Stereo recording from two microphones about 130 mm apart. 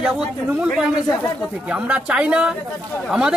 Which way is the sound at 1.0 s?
20° left (ahead or behind).